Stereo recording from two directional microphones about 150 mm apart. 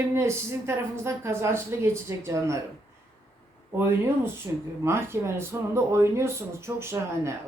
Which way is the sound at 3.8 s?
15° right (ahead or behind).